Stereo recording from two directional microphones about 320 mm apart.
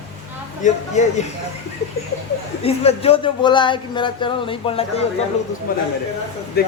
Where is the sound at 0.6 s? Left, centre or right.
Left.